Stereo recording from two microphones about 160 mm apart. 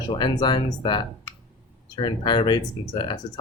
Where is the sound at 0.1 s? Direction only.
30° left (ahead or behind).